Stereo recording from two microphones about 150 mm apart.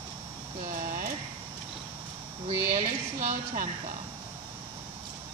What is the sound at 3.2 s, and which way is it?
Speech, 55° right (ahead or behind).